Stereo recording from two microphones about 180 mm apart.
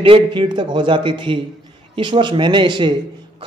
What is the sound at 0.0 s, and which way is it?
A man's voice, 30° right (ahead or behind).